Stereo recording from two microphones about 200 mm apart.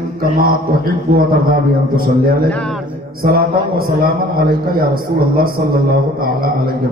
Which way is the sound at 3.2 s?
45° right (ahead or behind).